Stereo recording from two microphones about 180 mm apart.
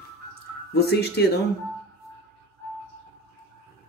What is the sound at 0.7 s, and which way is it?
Speech, 65° left (ahead or behind).